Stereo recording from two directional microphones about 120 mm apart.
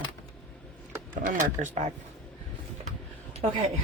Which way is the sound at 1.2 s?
90° right.